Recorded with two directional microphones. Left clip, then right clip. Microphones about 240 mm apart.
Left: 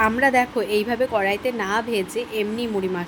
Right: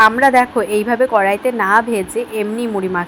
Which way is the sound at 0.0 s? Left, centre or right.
Centre.